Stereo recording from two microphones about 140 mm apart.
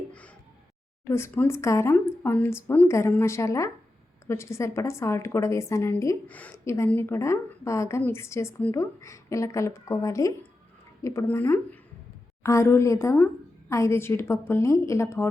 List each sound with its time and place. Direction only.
1.0 s a woman's voice: 20° left (ahead or behind)